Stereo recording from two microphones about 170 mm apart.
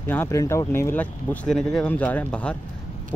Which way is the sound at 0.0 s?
15° left (ahead or behind).